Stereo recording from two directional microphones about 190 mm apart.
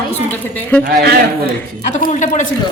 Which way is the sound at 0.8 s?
55° right (ahead or behind).